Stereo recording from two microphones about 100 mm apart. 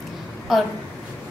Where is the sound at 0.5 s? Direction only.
Centre (ahead or behind).